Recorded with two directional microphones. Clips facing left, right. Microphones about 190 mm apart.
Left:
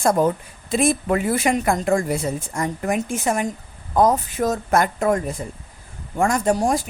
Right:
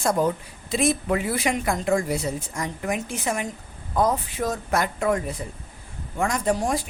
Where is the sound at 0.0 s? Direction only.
50° left (ahead or behind).